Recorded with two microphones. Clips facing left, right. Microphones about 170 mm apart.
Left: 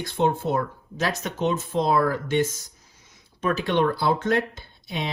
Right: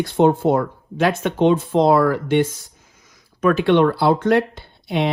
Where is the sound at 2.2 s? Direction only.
45° left (ahead or behind).